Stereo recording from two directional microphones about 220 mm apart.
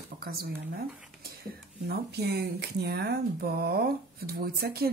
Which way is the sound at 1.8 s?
45° right (ahead or behind).